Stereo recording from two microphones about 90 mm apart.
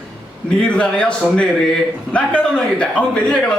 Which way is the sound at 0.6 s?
10° left (ahead or behind).